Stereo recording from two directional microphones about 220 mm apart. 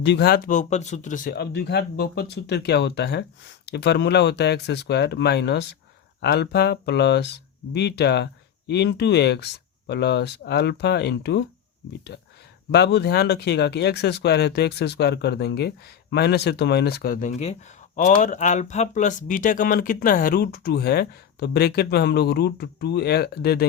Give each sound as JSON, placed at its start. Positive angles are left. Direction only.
{"t": 0.0, "sound": "speech", "side_deg": 50}
{"t": 12.7, "sound": "speech", "side_deg": 50}